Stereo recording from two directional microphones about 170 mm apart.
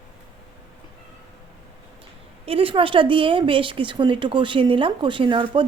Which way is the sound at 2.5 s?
35° right (ahead or behind).